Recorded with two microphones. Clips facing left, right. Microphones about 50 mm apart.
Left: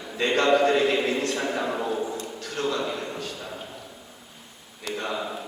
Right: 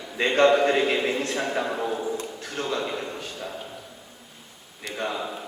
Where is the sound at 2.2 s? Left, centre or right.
Right.